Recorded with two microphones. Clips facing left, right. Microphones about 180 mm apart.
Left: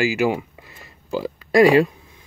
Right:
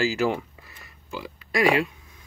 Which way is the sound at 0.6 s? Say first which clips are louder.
Left 5 dB; 25° left (ahead or behind).